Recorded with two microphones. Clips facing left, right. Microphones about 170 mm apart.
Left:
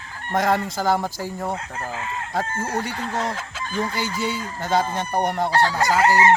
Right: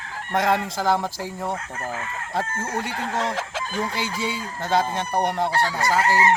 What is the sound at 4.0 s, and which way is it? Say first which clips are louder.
Speech: left 2 dB; 25° right (ahead or behind).